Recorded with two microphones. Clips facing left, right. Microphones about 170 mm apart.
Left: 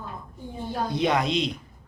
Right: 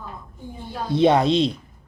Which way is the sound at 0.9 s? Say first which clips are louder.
Right 8 dB; 30° right (ahead or behind).